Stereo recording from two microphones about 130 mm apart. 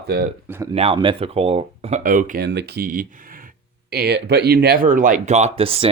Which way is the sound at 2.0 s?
90° right.